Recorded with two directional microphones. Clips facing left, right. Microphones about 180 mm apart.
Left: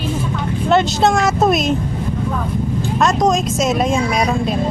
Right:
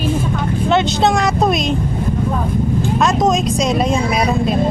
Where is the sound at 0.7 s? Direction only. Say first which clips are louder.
Left 1 dB; centre (ahead or behind).